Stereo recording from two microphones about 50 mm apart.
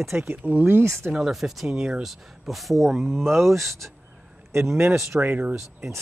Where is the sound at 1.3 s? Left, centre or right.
Centre.